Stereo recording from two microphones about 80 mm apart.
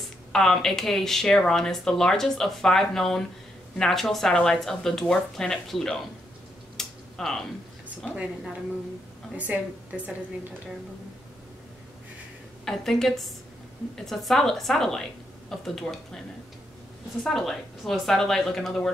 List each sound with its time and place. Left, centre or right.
0.3 s speech: centre
6.8 s a sound: centre
9.3 s a woman's voice: centre
12.6 s speech: centre
17.2 s speech: centre